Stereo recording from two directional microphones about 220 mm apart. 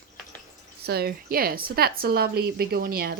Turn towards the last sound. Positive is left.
turn(degrees=-45)  # may be behind; listen again after turning